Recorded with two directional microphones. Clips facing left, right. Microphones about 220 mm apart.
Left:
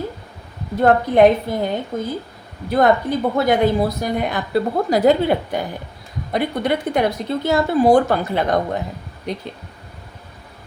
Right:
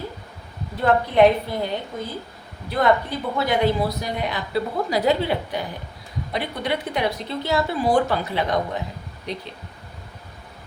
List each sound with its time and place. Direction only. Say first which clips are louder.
0.8 s a woman's voice: left 4 dB; 50° left (ahead or behind)